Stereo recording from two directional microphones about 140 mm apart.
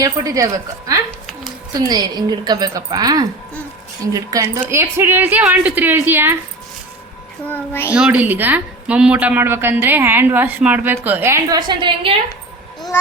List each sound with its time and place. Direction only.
0.0 s a woman's voice: 25° right (ahead or behind)
7.4 s a child's voice: 15° left (ahead or behind)
7.9 s a woman's voice: 10° right (ahead or behind)
11.4 s a woman's voice: 30° right (ahead or behind)